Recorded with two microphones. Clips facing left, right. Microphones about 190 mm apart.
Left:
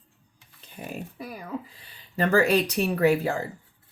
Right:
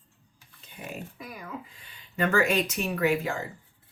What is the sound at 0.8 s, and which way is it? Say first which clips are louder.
Speech: left 3 dB; 40° left (ahead or behind).